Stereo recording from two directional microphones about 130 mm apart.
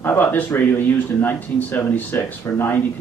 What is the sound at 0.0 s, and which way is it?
Speech, 15° left (ahead or behind).